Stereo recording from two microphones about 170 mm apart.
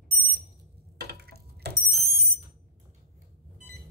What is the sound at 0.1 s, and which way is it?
Alarm, 65° right (ahead or behind).